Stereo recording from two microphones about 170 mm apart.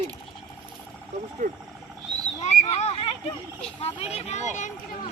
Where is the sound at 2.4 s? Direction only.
40° left (ahead or behind).